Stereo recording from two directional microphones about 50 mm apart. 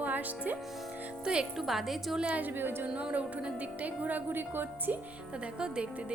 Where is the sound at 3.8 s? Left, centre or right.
Right.